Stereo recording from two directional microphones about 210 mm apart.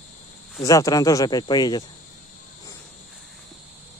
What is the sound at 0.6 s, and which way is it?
Speech, 15° left (ahead or behind).